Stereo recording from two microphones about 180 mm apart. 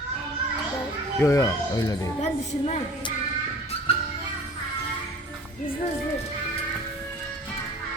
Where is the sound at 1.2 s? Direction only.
15° left (ahead or behind).